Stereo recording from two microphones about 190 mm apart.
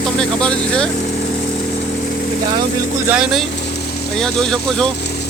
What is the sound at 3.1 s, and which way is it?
Speech, 5° right (ahead or behind).